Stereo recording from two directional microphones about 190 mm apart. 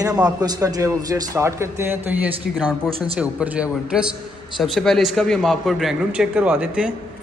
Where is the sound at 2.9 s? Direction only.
30° right (ahead or behind).